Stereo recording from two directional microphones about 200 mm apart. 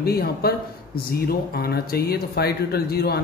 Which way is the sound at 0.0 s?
50° left (ahead or behind).